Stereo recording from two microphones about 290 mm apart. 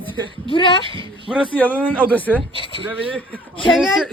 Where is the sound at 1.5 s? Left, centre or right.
Centre.